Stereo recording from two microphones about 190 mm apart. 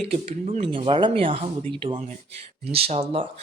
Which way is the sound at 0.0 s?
30° right (ahead or behind).